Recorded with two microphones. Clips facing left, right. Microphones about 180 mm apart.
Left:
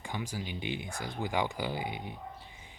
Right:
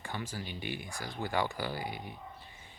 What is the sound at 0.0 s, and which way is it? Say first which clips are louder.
Speech: left 2 dB; 15° left (ahead or behind).